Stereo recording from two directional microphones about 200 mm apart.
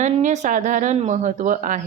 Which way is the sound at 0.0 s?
35° right (ahead or behind).